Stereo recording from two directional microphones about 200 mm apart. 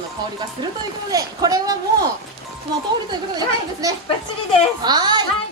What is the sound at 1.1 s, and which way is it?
Speech, 20° right (ahead or behind).